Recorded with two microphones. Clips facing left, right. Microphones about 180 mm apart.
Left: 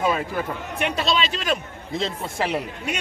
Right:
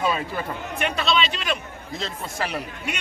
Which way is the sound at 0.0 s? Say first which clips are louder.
Left 2 dB; 10° left (ahead or behind).